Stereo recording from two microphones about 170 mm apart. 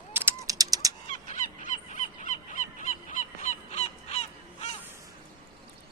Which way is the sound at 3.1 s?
45° left (ahead or behind).